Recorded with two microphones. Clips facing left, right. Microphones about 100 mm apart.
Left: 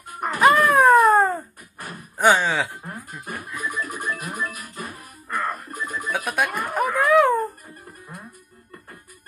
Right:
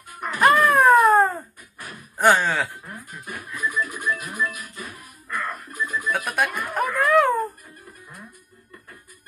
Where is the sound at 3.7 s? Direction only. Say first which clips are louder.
Right 2 dB; 40° left (ahead or behind).